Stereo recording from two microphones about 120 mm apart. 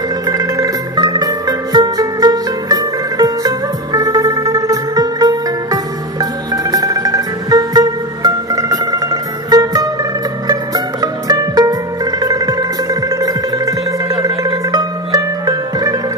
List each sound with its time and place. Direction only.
0.3 s music: 30° right (ahead or behind)
14.2 s music: 35° right (ahead or behind)